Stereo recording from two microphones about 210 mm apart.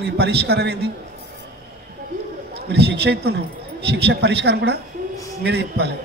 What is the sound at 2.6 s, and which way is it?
A man's voice, 50° right (ahead or behind).